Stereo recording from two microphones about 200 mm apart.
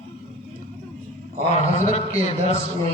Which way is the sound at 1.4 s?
35° left (ahead or behind).